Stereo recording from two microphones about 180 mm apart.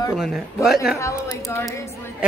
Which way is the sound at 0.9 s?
15° left (ahead or behind).